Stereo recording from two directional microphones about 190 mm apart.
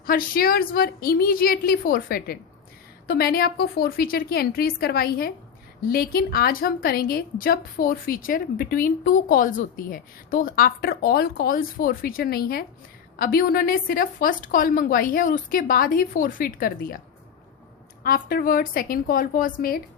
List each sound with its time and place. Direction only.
0.0 s a woman's voice: 50° left (ahead or behind)
18.0 s a woman's voice: 50° left (ahead or behind)